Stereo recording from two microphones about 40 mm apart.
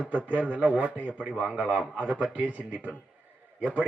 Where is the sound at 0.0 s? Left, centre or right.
Right.